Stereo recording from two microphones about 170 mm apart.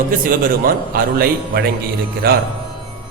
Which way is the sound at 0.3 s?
60° right (ahead or behind).